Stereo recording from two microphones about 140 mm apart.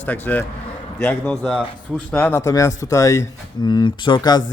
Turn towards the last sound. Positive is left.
turn(degrees=30)  # may be behind; listen again after turning